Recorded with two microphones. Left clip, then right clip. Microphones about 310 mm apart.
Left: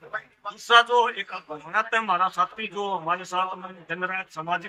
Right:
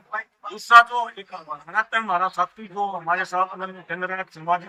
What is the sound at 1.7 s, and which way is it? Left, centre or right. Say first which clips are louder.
Speech: right 1 dB; centre.